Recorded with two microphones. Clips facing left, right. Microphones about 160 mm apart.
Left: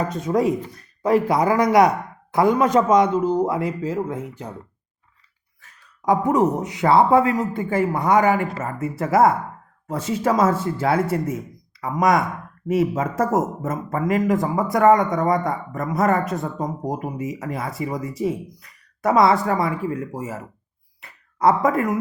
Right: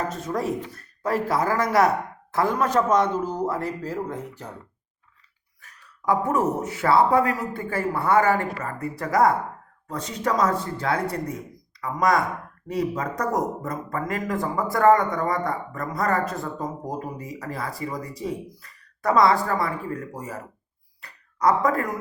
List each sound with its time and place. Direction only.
0.3 s speech: 15° left (ahead or behind)
6.1 s speech: 20° left (ahead or behind)